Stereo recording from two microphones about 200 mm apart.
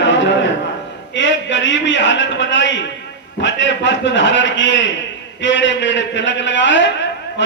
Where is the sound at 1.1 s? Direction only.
65° left (ahead or behind).